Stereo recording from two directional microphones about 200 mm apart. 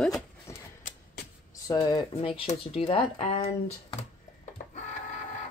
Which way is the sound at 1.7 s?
20° left (ahead or behind).